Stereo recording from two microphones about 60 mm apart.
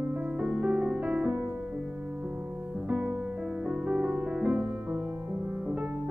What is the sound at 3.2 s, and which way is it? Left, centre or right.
Music, centre.